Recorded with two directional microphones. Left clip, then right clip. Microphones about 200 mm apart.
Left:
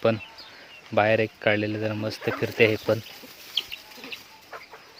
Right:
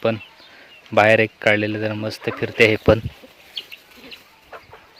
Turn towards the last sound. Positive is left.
turn(degrees=-50)  # may be behind; listen again after turning